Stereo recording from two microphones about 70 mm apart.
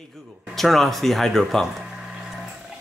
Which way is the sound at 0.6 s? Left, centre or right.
Centre.